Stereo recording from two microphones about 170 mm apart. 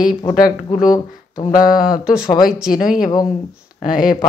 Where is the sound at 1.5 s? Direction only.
55° left (ahead or behind).